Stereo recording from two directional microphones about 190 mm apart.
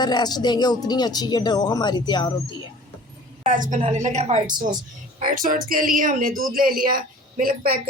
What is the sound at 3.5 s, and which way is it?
A woman's voice, 45° right (ahead or behind).